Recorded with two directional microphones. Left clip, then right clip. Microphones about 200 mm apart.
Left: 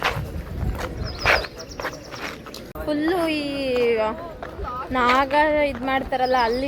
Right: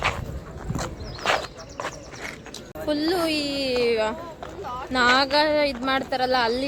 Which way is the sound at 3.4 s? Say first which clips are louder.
Even; 65° right (ahead or behind).